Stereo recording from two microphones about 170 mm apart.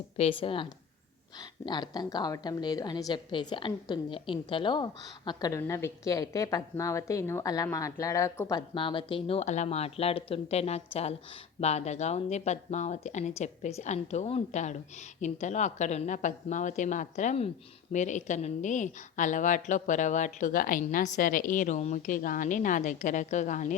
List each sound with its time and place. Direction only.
0.2 s a woman's voice: 35° left (ahead or behind)